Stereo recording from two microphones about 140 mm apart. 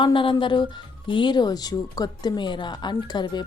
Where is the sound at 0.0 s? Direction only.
35° left (ahead or behind).